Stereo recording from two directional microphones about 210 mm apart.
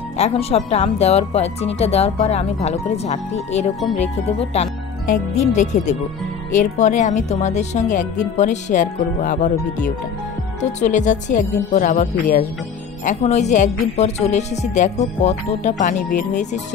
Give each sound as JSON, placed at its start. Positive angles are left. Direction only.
{"t": 0.2, "sound": "a woman's voice", "side_deg": 30}
{"t": 10.6, "sound": "a woman's voice", "side_deg": 35}